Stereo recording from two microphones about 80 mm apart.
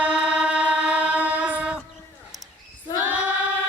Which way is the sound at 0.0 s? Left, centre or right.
Centre.